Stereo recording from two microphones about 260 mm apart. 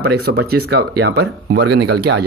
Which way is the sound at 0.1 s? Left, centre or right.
Right.